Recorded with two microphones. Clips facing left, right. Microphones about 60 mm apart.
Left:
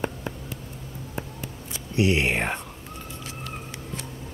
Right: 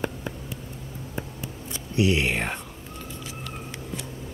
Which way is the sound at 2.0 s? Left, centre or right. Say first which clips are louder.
Left 1 dB; left.